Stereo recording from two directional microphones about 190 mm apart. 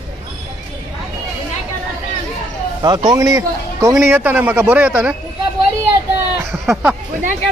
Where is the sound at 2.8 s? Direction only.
25° right (ahead or behind); by 5.1 s 5° right (ahead or behind).